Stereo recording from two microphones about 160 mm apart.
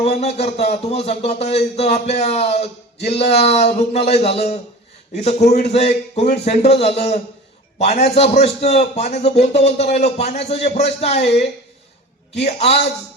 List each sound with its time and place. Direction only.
0.2 s a man's voice: 40° left (ahead or behind)
12.4 s speech: 40° left (ahead or behind)